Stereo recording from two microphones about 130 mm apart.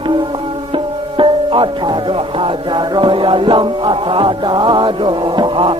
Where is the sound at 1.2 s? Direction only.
40° right (ahead or behind).